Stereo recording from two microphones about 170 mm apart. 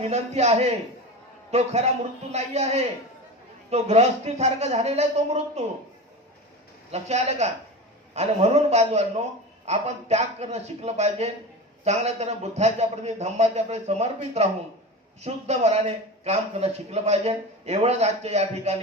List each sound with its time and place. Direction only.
0.0 s a man's voice: 40° right (ahead or behind)
6.9 s a man's voice: 40° right (ahead or behind)